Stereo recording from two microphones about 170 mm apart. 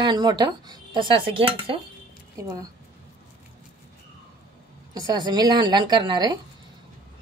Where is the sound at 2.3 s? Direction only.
20° right (ahead or behind).